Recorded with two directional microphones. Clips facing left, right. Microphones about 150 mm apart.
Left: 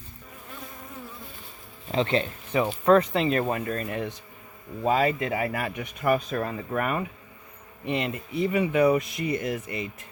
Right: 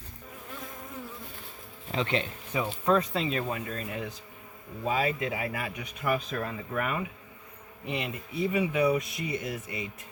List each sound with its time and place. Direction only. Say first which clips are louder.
1.9 s speech: left 5 dB; 35° left (ahead or behind)
2.5 s speech: left 6 dB; 65° left (ahead or behind); by 7.1 s 50° left (ahead or behind)
7.9 s speech: left 5 dB; 60° left (ahead or behind)
9.1 s speech: left 5 dB; 5° right (ahead or behind)
9.4 s speech: left 5 dB; 55° left (ahead or behind)